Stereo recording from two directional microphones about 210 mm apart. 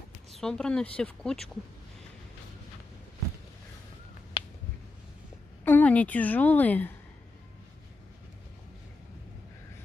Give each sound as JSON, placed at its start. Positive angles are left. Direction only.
{"t": 0.3, "sound": "speech", "side_deg": 5}
{"t": 4.4, "sound": "finger snapping", "side_deg": 20}
{"t": 5.7, "sound": "a woman's voice", "side_deg": 5}